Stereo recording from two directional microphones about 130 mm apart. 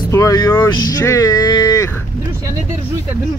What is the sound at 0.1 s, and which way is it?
Speech, 25° left (ahead or behind).